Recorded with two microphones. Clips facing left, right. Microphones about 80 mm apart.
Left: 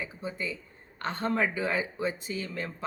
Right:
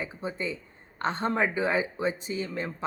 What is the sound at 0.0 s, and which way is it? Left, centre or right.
Speech, right.